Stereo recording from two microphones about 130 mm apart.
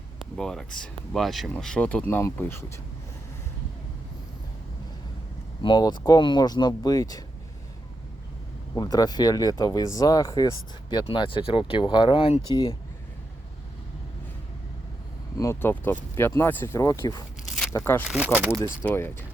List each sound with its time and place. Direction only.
0.3 s speech: 5° left (ahead or behind); by 2.7 s 20° left (ahead or behind)
5.6 s speech: 35° left (ahead or behind)
8.7 s speech: 30° left (ahead or behind)
15.4 s speech: 20° left (ahead or behind)
17.5 s biting: centre (ahead or behind)
17.7 s speech: 20° left (ahead or behind)